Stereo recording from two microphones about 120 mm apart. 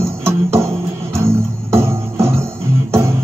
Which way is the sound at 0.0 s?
20° right (ahead or behind).